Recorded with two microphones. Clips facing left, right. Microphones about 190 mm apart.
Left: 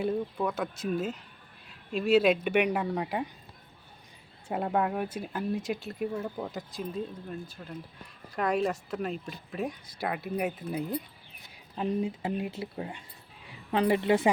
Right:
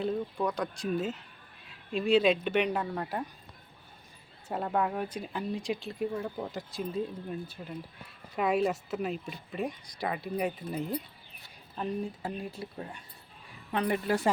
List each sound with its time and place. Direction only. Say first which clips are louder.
0.0 s speech: left 1 dB; 5° left (ahead or behind)
4.4 s speech: left 2 dB; 10° left (ahead or behind)
11.7 s speech: left 4 dB; 15° left (ahead or behind)